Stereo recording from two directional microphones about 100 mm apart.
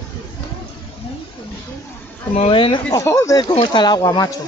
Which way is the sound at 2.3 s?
65° left (ahead or behind).